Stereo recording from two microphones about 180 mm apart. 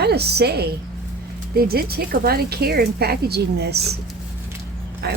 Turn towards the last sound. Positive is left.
turn(degrees=-65)  # may be behind; listen again after turning